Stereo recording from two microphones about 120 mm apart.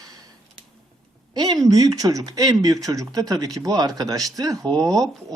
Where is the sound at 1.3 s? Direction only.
35° right (ahead or behind).